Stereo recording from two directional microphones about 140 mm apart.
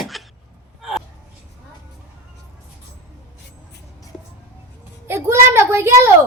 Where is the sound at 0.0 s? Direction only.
Centre (ahead or behind).